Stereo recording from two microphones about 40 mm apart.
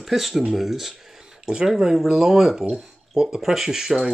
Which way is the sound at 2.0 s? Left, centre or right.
Centre.